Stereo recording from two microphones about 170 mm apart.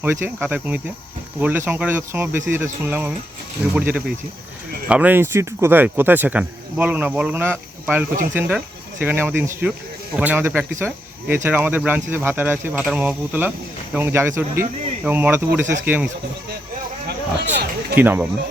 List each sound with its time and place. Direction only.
0.0 s speech: 10° right (ahead or behind)
17.1 s a sound: 70° right (ahead or behind)
17.9 s speech: 10° right (ahead or behind)